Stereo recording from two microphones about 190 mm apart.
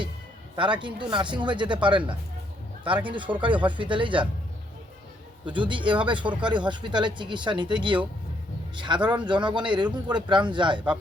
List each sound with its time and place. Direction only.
0.6 s speech: 25° right (ahead or behind)
3.1 s speech: 25° right (ahead or behind)
5.5 s speech: 25° right (ahead or behind)